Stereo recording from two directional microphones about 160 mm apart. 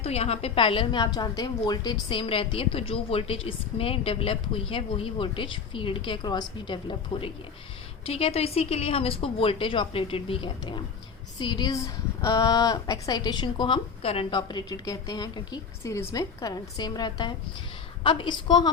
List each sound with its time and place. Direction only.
0.0 s a woman's voice: 40° left (ahead or behind)